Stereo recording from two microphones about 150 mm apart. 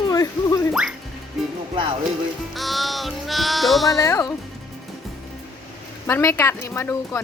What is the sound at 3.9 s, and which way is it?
Speech, 20° left (ahead or behind).